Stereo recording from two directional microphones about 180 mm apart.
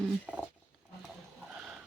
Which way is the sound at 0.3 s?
5° right (ahead or behind).